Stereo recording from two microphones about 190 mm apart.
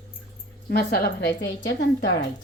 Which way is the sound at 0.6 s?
55° left (ahead or behind).